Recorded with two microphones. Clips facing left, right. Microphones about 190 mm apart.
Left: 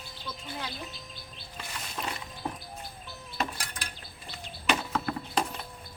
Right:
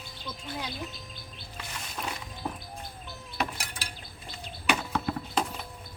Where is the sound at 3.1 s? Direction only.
10° right (ahead or behind).